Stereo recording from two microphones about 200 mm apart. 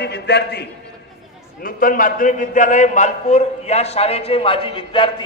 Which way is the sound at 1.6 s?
45° left (ahead or behind).